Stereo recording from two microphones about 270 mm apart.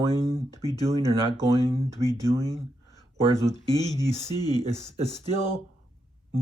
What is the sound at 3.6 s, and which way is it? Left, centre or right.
Speech, centre.